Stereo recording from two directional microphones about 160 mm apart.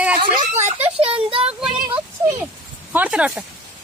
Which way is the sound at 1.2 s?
35° right (ahead or behind).